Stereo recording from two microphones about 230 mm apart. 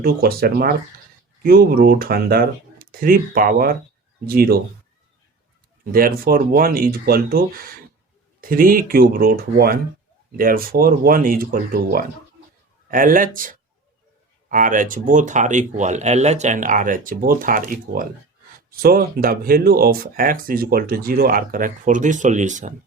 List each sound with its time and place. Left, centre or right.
0.0 s speech: right
5.8 s speech: right